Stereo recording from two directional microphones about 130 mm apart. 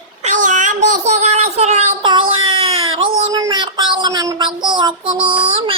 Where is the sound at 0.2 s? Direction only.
70° right (ahead or behind).